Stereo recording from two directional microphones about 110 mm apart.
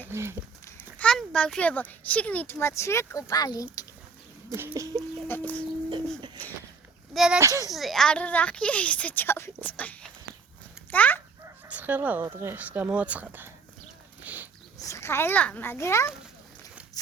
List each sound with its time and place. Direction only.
0.1 s speech: 25° right (ahead or behind)
0.6 s speech: 15° left (ahead or behind); by 3.8 s 35° left (ahead or behind)
4.7 s chicken: 35° right (ahead or behind)
5.3 s a woman's voice: 15° left (ahead or behind)
7.1 s speech: 5° right (ahead or behind)
7.3 s speech: 30° right (ahead or behind)
7.7 s a woman's voice: centre (ahead or behind)
11.7 s speech: 15° right (ahead or behind)
14.3 s a sound: 15° right (ahead or behind)
14.8 s a child's voice: 30° left (ahead or behind)